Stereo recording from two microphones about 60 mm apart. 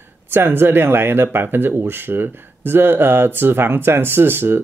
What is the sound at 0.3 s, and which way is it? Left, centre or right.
Speech, right.